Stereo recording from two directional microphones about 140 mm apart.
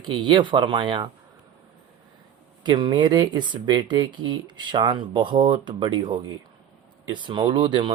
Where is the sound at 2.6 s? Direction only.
35° right (ahead or behind).